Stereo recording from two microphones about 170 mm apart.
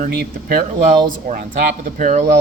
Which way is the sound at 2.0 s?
45° right (ahead or behind).